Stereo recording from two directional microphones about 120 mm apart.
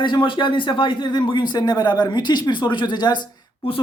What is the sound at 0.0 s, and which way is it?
Speech, 40° left (ahead or behind).